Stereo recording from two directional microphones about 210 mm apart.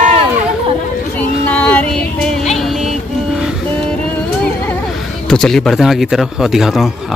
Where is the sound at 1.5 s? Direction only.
5° left (ahead or behind).